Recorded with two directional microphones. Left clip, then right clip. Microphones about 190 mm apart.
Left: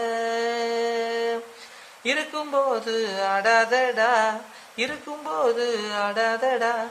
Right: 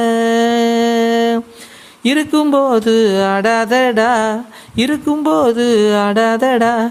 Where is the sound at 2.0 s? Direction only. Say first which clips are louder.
Right 12 dB; 45° right (ahead or behind).